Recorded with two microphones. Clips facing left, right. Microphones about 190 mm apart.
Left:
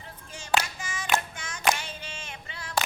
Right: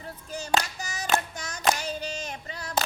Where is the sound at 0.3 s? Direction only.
40° right (ahead or behind).